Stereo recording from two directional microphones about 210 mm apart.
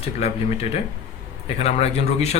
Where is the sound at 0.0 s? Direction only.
30° left (ahead or behind).